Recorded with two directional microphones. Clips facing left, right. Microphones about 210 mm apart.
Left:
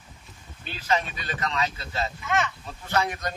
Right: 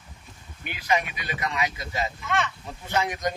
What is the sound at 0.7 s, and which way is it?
Speech, 15° right (ahead or behind).